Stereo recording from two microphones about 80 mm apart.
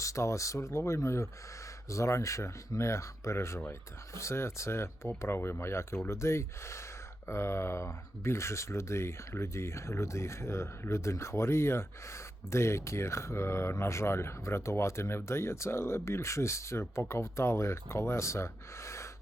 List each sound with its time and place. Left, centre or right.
0.0 s speech: left